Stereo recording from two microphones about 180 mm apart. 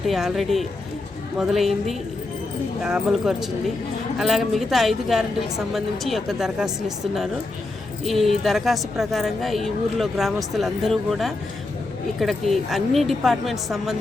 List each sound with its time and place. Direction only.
0.1 s a woman's voice: centre (ahead or behind)